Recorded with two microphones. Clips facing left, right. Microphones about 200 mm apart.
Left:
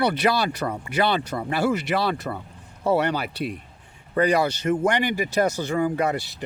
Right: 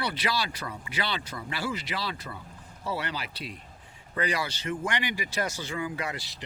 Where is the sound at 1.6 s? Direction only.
65° left (ahead or behind).